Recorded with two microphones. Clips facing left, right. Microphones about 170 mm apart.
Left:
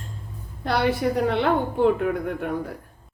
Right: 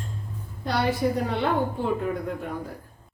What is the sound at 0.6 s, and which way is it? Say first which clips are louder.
A woman's voice: left 2 dB; 60° left (ahead or behind).